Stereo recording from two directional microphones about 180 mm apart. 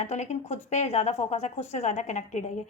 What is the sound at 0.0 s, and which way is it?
Speech, 40° left (ahead or behind).